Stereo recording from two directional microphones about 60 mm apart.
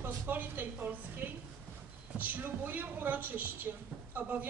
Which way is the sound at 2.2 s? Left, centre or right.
Right.